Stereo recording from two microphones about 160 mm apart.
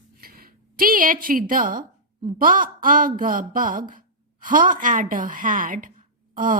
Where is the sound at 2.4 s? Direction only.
60° right (ahead or behind).